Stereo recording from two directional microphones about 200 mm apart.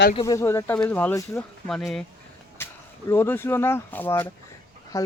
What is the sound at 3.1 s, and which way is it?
Speech, 10° left (ahead or behind).